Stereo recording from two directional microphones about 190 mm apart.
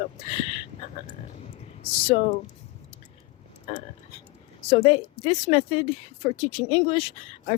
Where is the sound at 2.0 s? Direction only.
30° left (ahead or behind).